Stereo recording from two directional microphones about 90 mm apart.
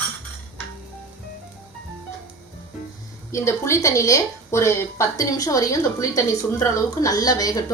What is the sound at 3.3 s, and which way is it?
Speech, 30° left (ahead or behind).